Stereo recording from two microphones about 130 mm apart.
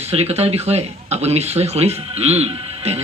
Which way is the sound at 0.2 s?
55° right (ahead or behind).